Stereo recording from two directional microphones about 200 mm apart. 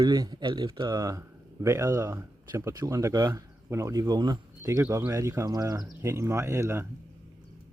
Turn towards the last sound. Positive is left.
turn(degrees=-15)  # may be behind; listen again after turning